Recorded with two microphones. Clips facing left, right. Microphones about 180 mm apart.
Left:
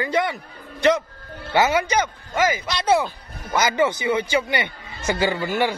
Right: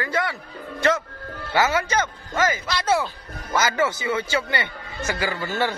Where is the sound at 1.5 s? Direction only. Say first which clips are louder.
Left 2 dB; 15° left (ahead or behind).